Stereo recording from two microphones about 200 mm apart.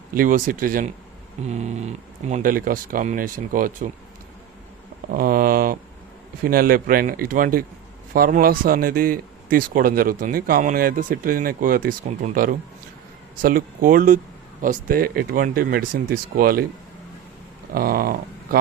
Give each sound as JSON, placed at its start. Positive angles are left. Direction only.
{"t": 0.1, "sound": "speech", "side_deg": -45}
{"t": 5.1, "sound": "speech", "side_deg": -45}
{"t": 17.7, "sound": "speech", "side_deg": -45}